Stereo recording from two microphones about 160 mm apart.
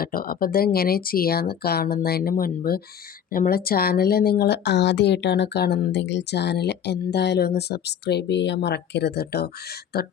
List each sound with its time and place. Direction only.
0.0 s speech: 65° left (ahead or behind); by 10.1 s 85° left